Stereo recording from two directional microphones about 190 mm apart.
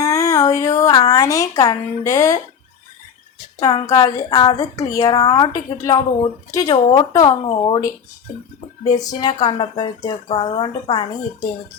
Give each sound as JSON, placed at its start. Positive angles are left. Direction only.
{"t": 0.0, "sound": "speech", "side_deg": 15}
{"t": 3.6, "sound": "a woman's voice", "side_deg": 20}
{"t": 6.7, "sound": "a woman's voice", "side_deg": 30}